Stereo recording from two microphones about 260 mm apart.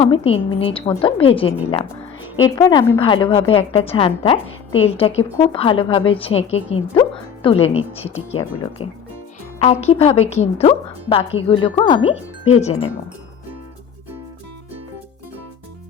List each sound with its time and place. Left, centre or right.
0.0 s a woman's voice: left
2.6 s a woman's voice: centre